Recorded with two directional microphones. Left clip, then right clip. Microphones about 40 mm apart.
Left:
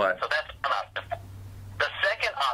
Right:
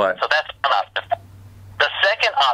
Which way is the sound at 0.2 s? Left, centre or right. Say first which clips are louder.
Right 9 dB; right.